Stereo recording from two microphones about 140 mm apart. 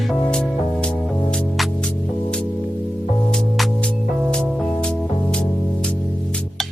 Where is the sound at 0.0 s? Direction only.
5° left (ahead or behind).